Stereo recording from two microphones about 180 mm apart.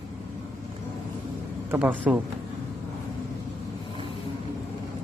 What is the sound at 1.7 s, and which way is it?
Speech, 10° right (ahead or behind).